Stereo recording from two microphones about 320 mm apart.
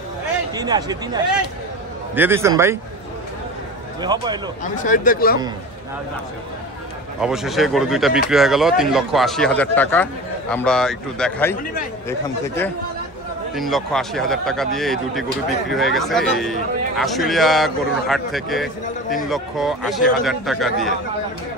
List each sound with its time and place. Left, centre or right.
0.6 s speech: centre
4.0 s speech: centre
4.6 s speech: left
7.2 s a man's voice: centre